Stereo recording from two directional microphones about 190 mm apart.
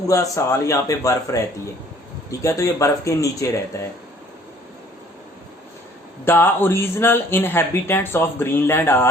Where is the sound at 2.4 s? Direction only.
15° left (ahead or behind).